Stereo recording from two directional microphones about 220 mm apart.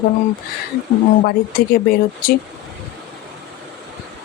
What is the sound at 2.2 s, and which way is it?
Speech, 40° left (ahead or behind).